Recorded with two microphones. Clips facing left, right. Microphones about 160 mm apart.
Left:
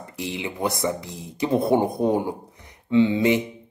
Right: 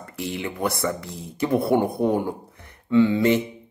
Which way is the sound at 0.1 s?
15° left (ahead or behind).